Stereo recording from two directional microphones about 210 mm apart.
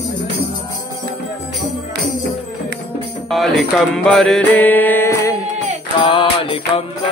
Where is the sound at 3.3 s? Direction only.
Centre (ahead or behind).